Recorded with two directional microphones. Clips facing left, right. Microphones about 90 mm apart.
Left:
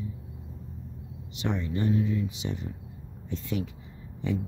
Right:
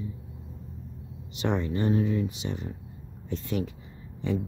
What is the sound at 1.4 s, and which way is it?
Speech, 60° right (ahead or behind).